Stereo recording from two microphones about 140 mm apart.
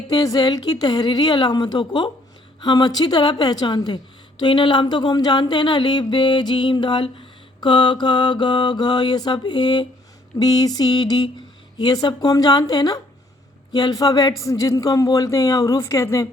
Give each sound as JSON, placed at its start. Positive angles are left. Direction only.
{"t": 0.1, "sound": "speech", "side_deg": 30}